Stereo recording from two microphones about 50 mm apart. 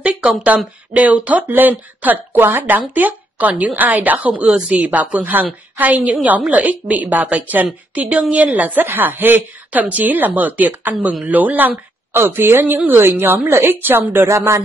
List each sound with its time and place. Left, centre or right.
0.0 s a sound: right
0.9 s a woman's voice: right
2.3 s a woman's voice: right
12.1 s a woman's voice: right